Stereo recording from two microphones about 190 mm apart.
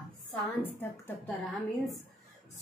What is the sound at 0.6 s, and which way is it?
Speech, 10° left (ahead or behind).